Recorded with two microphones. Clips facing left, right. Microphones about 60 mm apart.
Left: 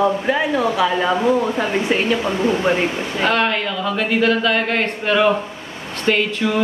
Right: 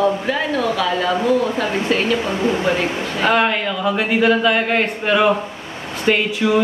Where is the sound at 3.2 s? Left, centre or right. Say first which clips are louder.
Right 2 dB; centre.